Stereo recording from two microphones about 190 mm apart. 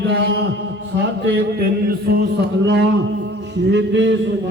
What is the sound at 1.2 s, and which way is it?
A man's voice, 60° right (ahead or behind).